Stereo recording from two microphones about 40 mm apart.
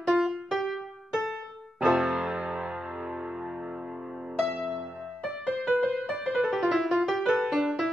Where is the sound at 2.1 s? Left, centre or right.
Right.